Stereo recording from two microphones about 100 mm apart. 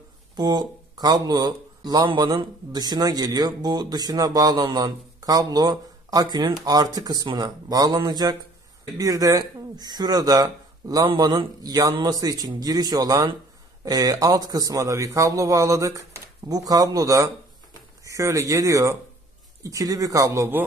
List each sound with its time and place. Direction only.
0.4 s speech: 45° right (ahead or behind); by 20.6 s 25° right (ahead or behind)